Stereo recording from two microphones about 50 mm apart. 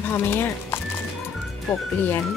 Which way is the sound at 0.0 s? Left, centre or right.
Left.